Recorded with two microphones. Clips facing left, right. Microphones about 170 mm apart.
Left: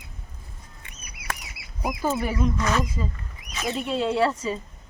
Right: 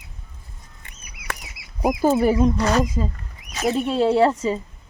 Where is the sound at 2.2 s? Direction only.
35° right (ahead or behind).